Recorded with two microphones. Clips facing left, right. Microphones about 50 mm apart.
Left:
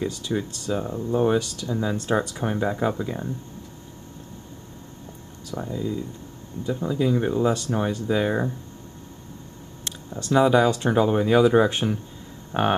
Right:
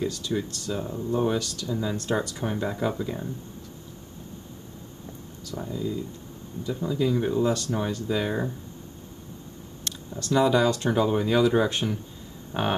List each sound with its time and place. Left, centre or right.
0.0 s speech: centre
5.5 s speech: centre
9.8 s speech: centre